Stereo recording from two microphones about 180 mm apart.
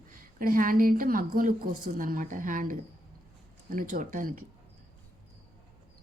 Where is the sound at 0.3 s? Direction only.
50° right (ahead or behind).